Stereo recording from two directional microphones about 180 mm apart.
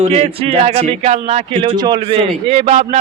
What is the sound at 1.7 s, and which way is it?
A man's voice, 25° right (ahead or behind).